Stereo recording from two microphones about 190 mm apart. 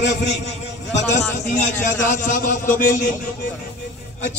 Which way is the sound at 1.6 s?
40° left (ahead or behind).